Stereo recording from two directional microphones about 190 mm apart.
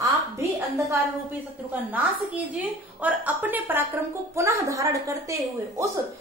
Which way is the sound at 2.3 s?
10° right (ahead or behind).